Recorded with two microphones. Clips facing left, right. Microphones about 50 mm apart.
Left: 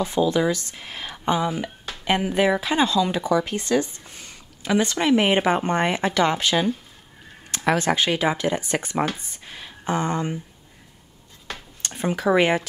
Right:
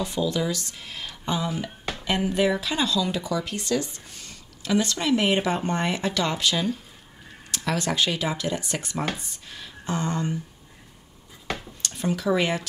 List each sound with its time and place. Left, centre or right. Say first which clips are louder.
0.0 s speech: left 5 dB; left
9.2 s a sound: left 2 dB; left
11.8 s speech: left 4 dB; left